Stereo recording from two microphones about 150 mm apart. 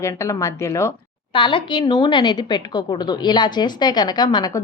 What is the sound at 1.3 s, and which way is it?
A woman's voice, 35° left (ahead or behind).